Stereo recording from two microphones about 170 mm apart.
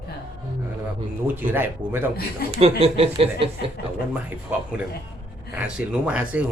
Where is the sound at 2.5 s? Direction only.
35° right (ahead or behind).